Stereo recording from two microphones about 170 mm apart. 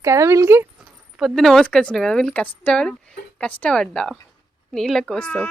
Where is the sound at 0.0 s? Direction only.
20° right (ahead or behind).